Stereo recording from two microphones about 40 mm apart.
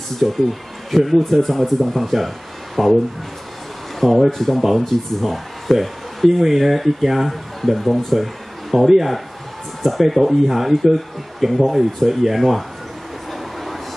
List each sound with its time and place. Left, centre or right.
0.2 s speech: centre
4.0 s speech: centre